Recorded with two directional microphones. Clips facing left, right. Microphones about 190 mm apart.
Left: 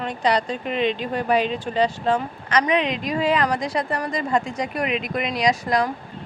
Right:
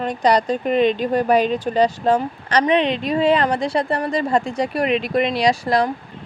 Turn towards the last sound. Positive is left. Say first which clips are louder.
# right 3 dB
turn(degrees=-30)  # may be behind; listen again after turning